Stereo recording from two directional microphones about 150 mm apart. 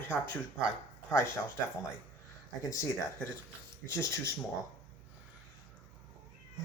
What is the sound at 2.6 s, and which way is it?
Speech, 20° left (ahead or behind).